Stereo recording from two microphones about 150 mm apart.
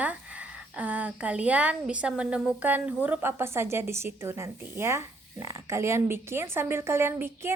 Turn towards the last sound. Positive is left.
turn(degrees=-15)  # may be behind; listen again after turning